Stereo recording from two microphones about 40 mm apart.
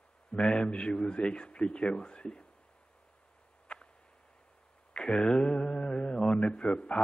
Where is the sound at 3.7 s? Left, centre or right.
Left.